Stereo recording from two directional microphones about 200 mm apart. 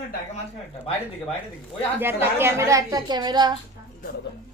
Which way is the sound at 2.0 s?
10° right (ahead or behind).